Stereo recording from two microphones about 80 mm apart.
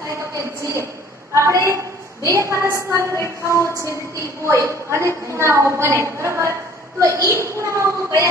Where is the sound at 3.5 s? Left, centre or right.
Left.